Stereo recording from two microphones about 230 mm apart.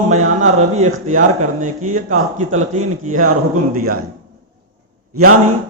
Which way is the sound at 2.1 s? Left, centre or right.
Right.